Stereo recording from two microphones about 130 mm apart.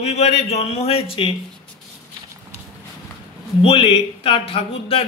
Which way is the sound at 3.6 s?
45° left (ahead or behind).